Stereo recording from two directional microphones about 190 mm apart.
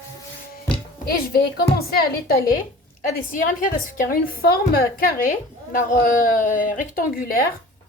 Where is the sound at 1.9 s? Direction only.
55° left (ahead or behind).